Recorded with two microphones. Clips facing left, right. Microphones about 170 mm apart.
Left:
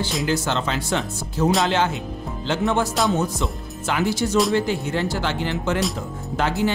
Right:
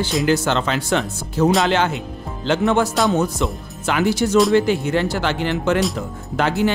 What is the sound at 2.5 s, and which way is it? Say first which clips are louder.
Speech: right 4 dB; 70° right (ahead or behind).